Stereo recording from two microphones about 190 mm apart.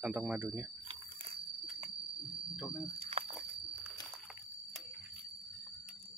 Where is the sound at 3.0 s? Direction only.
30° right (ahead or behind).